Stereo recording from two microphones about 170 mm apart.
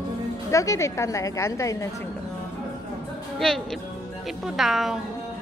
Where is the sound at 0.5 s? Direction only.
20° left (ahead or behind).